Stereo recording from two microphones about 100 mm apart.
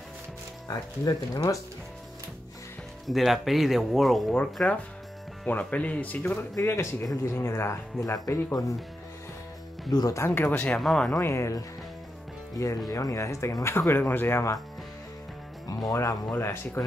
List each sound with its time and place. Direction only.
0.7 s speech: 40° left (ahead or behind)
3.1 s speech: centre (ahead or behind)
4.6 s speech: 10° left (ahead or behind)
6.3 s speech: 25° left (ahead or behind)
9.8 s speech: 45° left (ahead or behind)
10.1 s speech: 25° left (ahead or behind)
10.4 s speech: 15° left (ahead or behind)
11.1 s speech: 30° left (ahead or behind)
15.9 s speech: 35° left (ahead or behind)
16.3 s speech: 20° left (ahead or behind)